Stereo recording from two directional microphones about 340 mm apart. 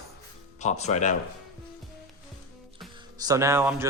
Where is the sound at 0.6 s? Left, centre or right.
Centre.